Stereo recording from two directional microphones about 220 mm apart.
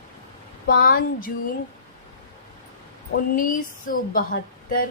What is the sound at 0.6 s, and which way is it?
Speech, 40° left (ahead or behind).